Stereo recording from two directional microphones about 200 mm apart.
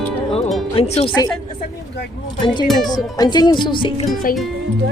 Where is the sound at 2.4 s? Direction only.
25° left (ahead or behind).